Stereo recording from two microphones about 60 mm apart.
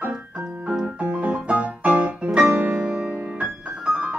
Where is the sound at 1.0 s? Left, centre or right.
Right.